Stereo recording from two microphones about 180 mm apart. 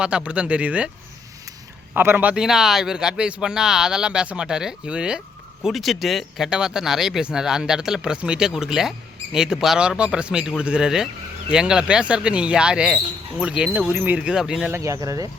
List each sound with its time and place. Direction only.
0.0 s speech: 5° right (ahead or behind)
1.9 s speech: 10° right (ahead or behind)
14.7 s speech: 15° right (ahead or behind)